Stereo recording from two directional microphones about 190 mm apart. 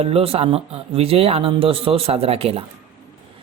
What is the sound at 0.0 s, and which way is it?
Speech, 30° right (ahead or behind).